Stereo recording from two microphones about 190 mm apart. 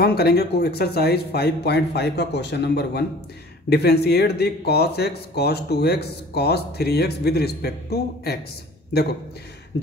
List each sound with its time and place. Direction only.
0.0 s speech: 55° left (ahead or behind)